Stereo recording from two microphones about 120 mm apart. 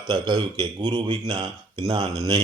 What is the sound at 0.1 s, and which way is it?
Speech, 40° right (ahead or behind).